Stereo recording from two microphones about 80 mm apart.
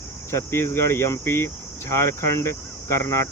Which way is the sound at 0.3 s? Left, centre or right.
Left.